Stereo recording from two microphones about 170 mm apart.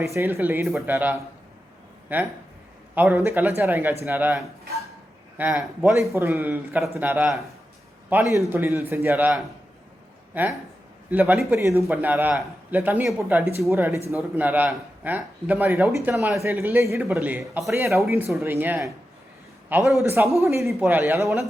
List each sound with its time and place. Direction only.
0.0 s a man's voice: 15° right (ahead or behind)
5.4 s a man's voice: 5° right (ahead or behind)
5.9 s a man's voice: 15° right (ahead or behind)
8.1 s a man's voice: 20° right (ahead or behind)
16.4 s a man's voice: 15° right (ahead or behind)
18.4 s a man's voice: 10° right (ahead or behind)
20.0 s a man's voice: 15° right (ahead or behind)